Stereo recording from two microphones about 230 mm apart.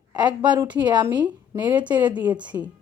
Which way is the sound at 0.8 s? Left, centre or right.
Centre.